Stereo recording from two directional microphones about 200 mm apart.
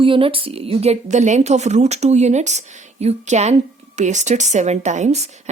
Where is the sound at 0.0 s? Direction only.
25° right (ahead or behind).